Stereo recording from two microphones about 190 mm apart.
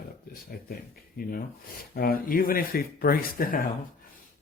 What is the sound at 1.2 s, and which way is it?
Speech, 50° left (ahead or behind).